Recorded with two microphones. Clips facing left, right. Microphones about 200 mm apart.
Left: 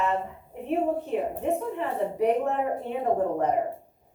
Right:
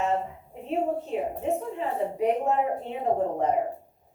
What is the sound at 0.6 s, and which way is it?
A woman's voice, 60° left (ahead or behind).